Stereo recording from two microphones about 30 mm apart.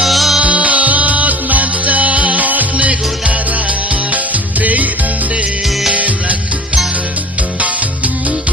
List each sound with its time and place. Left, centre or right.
0.1 s music: centre
0.4 s music: right
2.7 s music: right
5.9 s music: right